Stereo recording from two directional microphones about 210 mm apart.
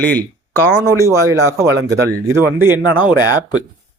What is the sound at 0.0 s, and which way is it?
Speech, 10° left (ahead or behind).